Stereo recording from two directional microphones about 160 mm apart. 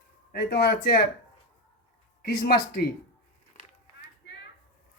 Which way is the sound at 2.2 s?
70° left (ahead or behind).